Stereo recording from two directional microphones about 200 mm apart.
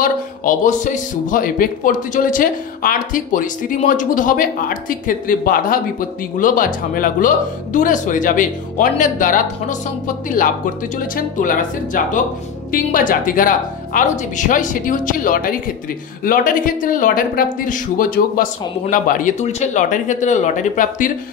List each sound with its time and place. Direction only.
0.0 s speech: 45° left (ahead or behind)